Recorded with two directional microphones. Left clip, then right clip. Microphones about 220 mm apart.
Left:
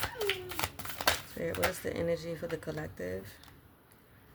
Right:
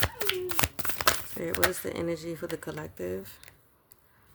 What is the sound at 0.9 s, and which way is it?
Speech, 50° right (ahead or behind).